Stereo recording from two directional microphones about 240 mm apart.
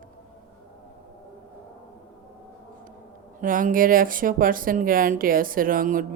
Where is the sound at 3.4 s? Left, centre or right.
Right.